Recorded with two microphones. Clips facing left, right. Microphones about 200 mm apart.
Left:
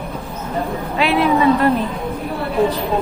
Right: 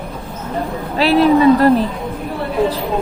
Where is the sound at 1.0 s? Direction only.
35° right (ahead or behind).